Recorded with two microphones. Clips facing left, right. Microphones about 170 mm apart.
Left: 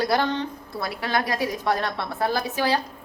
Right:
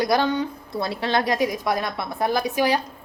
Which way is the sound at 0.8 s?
25° right (ahead or behind).